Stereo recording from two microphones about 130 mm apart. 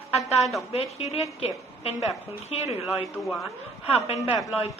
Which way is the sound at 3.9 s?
50° left (ahead or behind).